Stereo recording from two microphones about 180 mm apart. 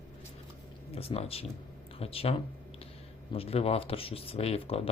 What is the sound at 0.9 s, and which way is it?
Speech, 35° left (ahead or behind).